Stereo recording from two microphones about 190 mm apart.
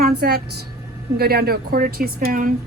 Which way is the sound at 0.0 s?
55° right (ahead or behind).